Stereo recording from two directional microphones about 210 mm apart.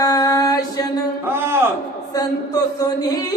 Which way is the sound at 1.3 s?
10° right (ahead or behind).